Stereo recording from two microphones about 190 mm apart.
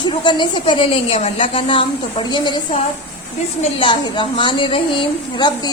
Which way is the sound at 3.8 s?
25° left (ahead or behind).